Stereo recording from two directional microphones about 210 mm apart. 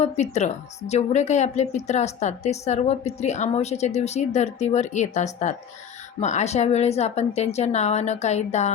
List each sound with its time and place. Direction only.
0.0 s a woman's voice: 30° left (ahead or behind)